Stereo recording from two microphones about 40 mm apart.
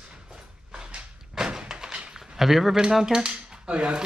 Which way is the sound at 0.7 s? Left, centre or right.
Centre.